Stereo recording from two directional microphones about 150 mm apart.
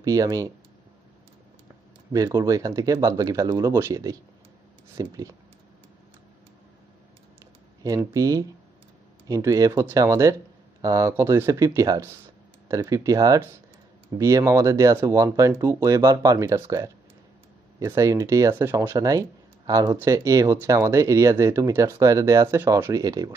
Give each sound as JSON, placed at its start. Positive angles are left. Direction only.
{"t": 0.0, "sound": "speech", "side_deg": -20}
{"t": 2.1, "sound": "speech", "side_deg": -25}
{"t": 7.8, "sound": "speech", "side_deg": -20}